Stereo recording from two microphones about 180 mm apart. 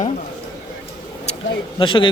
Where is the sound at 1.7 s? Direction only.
25° left (ahead or behind).